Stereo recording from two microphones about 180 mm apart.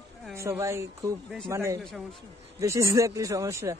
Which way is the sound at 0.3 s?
15° right (ahead or behind).